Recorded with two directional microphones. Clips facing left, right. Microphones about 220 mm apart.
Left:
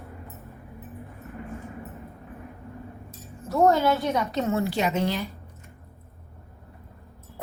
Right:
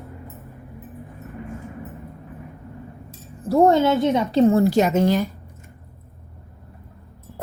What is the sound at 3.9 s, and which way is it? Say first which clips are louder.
A woman's voice: right 5 dB; 25° right (ahead or behind).